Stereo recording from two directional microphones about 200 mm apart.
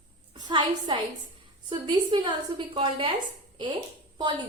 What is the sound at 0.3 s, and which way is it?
A woman's voice, 20° right (ahead or behind).